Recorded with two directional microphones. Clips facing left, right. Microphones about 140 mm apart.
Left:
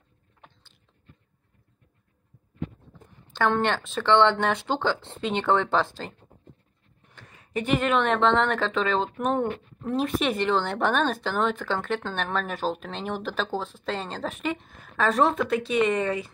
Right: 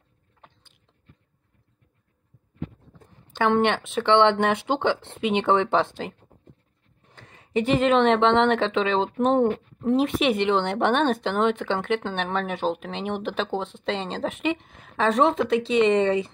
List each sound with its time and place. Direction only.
3.3 s a woman's voice: 15° right (ahead or behind)